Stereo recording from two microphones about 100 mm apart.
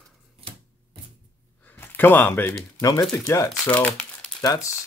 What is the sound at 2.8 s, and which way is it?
Speech, 40° left (ahead or behind).